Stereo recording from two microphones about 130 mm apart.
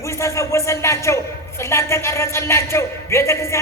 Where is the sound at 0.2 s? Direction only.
25° left (ahead or behind).